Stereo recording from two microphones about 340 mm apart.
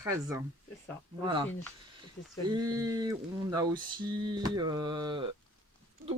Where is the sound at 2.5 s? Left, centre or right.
Centre.